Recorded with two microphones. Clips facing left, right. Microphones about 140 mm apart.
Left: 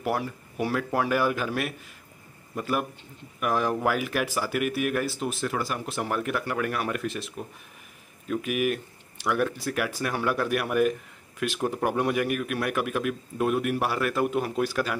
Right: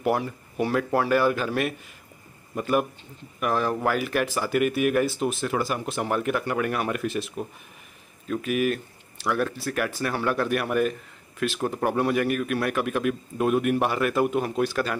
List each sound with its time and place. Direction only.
0.0 s speech: 5° left (ahead or behind)
3.3 s speech: 10° left (ahead or behind)
8.3 s speech: 10° left (ahead or behind)